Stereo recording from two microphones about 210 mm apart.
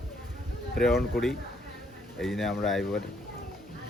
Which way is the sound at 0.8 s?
Centre (ahead or behind).